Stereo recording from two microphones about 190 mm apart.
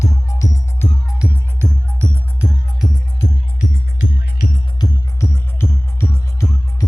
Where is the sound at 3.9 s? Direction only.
80° left.